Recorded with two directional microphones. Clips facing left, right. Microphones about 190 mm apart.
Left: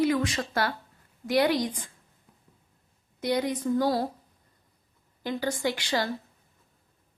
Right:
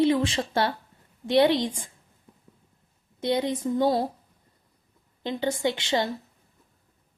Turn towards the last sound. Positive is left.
turn(degrees=-25)  # may be behind; listen again after turning